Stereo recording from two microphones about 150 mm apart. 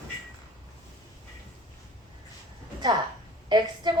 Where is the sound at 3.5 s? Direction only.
30° right (ahead or behind).